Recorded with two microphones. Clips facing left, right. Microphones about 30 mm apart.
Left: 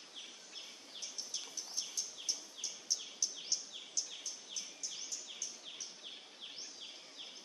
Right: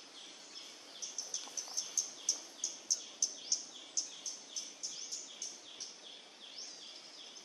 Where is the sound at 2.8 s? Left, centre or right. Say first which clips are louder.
Even; left.